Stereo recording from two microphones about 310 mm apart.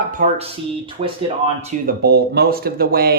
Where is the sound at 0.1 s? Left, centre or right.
Right.